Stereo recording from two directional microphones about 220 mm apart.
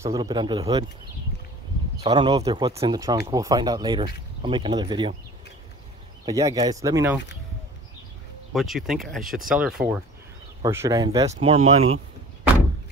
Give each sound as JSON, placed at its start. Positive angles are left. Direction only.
{"t": 0.0, "sound": "speech", "side_deg": -15}
{"t": 2.0, "sound": "speech", "side_deg": -20}
{"t": 6.2, "sound": "speech", "side_deg": -15}
{"t": 8.5, "sound": "speech", "side_deg": 0}
{"t": 10.6, "sound": "speech", "side_deg": -15}
{"t": 11.2, "sound": "speech", "side_deg": -25}